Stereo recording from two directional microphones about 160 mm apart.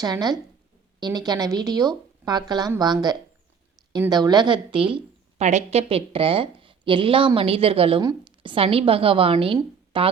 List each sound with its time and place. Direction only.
0.0 s a woman's voice: 25° right (ahead or behind)
5.4 s a woman's voice: 45° right (ahead or behind)